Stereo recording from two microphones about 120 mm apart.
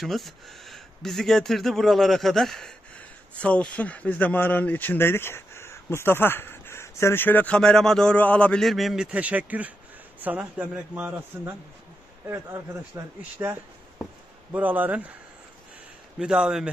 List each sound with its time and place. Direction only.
0.0 s a man's voice: centre (ahead or behind)
16.2 s a man's voice: 5° right (ahead or behind)